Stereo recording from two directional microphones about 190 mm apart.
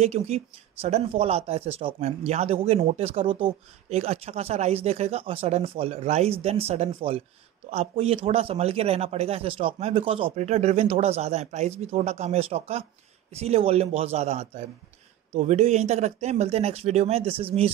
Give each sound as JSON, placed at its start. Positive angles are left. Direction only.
{"t": 0.0, "sound": "speech", "side_deg": -35}